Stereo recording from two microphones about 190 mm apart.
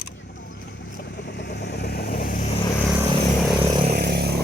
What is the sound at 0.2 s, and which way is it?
Vehicle, 70° left (ahead or behind).